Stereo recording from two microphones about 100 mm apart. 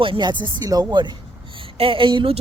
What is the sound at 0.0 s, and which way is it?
Speech, 55° right (ahead or behind).